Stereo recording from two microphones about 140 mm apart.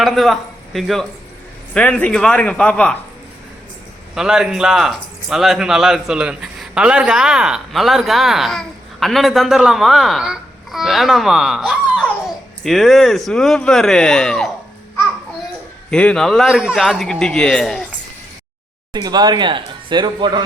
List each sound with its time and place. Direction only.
0.0 s a man's voice: centre (ahead or behind)
4.1 s speech: 5° right (ahead or behind)
15.9 s speech: 5° left (ahead or behind)
18.9 s speech: 30° right (ahead or behind)